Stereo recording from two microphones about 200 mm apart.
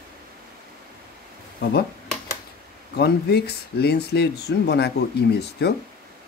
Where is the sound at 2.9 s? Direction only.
55° left (ahead or behind).